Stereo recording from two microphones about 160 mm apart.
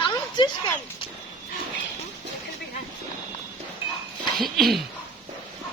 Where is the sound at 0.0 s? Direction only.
30° left (ahead or behind).